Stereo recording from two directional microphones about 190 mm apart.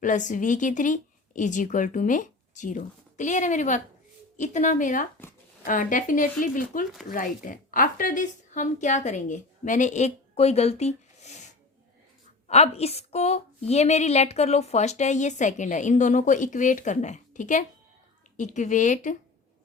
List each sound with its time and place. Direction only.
0.0 s a woman's voice: 40° left (ahead or behind)
12.5 s a woman's voice: 35° left (ahead or behind)